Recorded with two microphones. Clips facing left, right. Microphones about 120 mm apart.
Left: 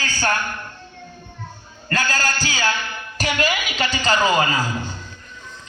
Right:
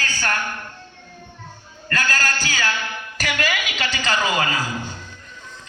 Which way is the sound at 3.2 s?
30° left (ahead or behind).